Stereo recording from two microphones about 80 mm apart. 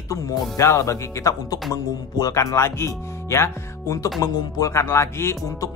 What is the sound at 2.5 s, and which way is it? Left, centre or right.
Speech, left.